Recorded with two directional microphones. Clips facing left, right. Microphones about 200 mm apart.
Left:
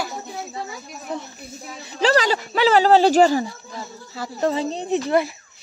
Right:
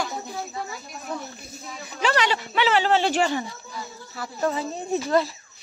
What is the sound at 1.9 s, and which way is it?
Speech, 35° left (ahead or behind).